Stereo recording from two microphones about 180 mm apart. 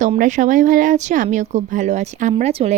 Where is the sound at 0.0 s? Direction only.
45° right (ahead or behind).